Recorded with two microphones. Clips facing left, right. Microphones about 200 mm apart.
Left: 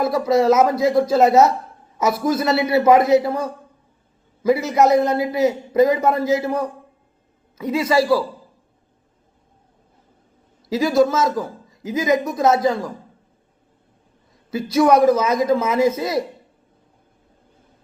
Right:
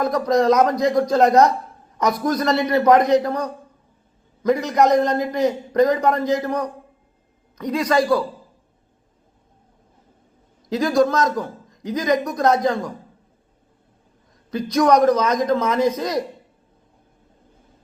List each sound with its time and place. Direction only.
0.0 s a man's voice: 5° left (ahead or behind)
10.7 s a man's voice: 5° left (ahead or behind)
14.5 s a man's voice: 5° left (ahead or behind)